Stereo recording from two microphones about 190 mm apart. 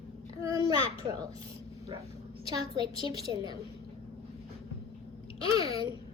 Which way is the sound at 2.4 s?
20° right (ahead or behind).